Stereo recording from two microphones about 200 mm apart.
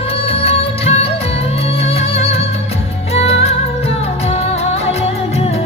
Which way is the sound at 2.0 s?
30° left (ahead or behind).